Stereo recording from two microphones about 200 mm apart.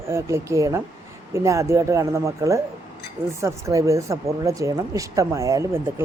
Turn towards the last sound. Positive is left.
turn(degrees=-15)  # may be behind; listen again after turning